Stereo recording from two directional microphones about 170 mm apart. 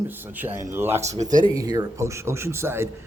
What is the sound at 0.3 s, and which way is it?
Speech, 10° right (ahead or behind).